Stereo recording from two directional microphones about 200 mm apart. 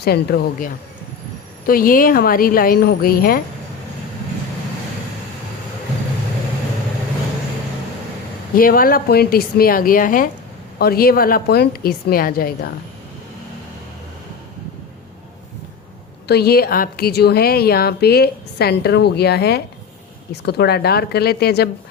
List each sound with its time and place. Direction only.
0.0 s a woman's voice: 50° left (ahead or behind)
8.5 s a woman's voice: 45° left (ahead or behind)
16.2 s a woman's voice: 55° left (ahead or behind)